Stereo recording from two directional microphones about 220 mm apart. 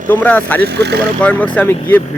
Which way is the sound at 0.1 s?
10° left (ahead or behind).